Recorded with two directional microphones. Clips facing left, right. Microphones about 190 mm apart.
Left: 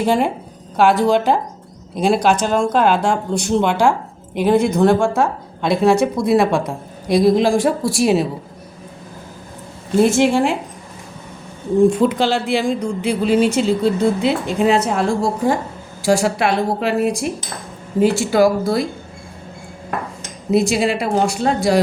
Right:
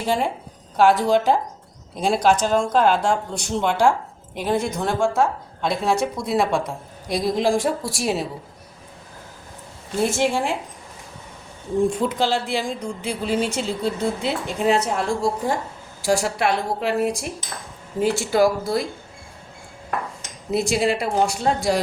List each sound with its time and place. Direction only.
0.0 s a woman's voice: 55° left (ahead or behind)
0.8 s a woman's voice: 70° left (ahead or behind)
10.0 s a woman's voice: 70° left (ahead or behind)
11.9 s a woman's voice: 80° left
20.5 s speech: 90° left